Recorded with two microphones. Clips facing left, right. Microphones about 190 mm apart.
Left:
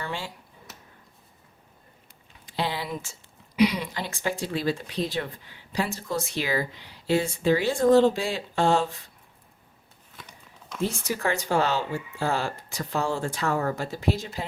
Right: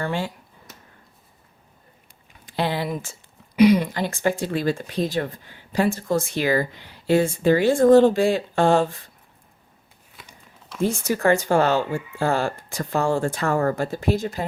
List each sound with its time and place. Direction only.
0.0 s speech: 55° right (ahead or behind)
2.5 s a sound: 55° right (ahead or behind)
3.5 s speech: 50° right (ahead or behind)
10.8 s speech: 50° right (ahead or behind)